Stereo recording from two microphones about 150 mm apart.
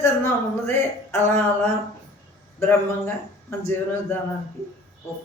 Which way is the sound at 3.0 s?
15° left (ahead or behind).